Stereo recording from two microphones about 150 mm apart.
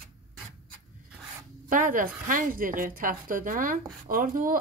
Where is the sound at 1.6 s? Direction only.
65° right (ahead or behind).